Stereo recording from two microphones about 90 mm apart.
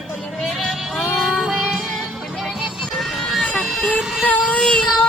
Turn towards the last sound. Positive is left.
turn(degrees=15)  # may be behind; listen again after turning